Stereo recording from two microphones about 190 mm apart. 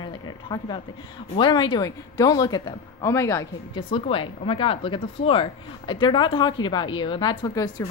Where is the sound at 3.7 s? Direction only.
30° left (ahead or behind).